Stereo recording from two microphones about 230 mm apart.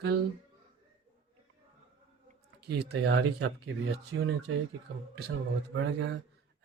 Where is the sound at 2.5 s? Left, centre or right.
Right.